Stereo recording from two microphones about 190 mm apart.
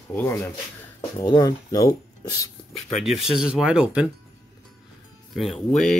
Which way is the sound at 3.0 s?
5° right (ahead or behind).